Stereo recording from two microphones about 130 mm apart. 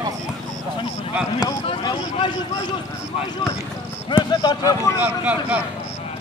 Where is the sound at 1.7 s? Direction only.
40° left (ahead or behind).